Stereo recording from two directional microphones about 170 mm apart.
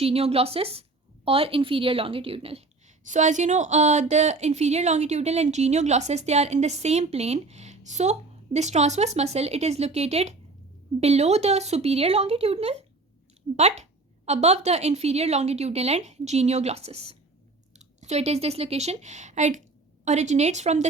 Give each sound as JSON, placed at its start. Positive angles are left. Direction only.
{"t": 0.0, "sound": "a woman's voice", "side_deg": -35}